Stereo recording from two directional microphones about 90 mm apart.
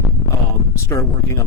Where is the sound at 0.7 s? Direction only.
35° left (ahead or behind).